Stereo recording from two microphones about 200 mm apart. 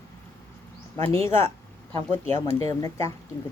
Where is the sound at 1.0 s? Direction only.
15° left (ahead or behind).